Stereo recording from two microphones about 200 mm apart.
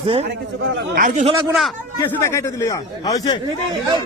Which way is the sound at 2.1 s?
15° left (ahead or behind).